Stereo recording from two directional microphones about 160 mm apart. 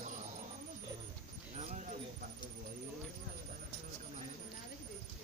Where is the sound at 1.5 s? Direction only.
45° right (ahead or behind).